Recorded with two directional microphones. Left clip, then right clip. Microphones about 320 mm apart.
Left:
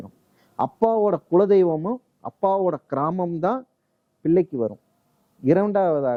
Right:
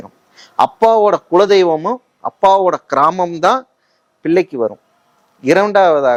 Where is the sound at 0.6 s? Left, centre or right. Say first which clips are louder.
Right 10 dB; centre.